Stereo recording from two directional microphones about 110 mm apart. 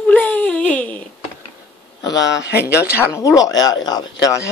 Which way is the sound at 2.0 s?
35° left (ahead or behind).